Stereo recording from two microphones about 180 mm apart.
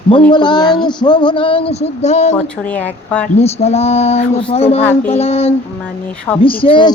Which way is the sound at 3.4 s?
35° left (ahead or behind).